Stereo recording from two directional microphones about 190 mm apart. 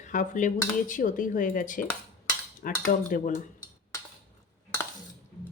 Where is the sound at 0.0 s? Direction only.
40° left (ahead or behind).